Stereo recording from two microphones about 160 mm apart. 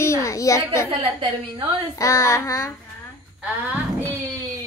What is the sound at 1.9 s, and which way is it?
Child singing, 20° left (ahead or behind).